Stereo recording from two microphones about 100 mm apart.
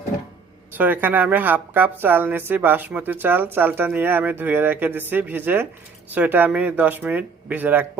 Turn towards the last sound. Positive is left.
turn(degrees=-20)  # may be behind; listen again after turning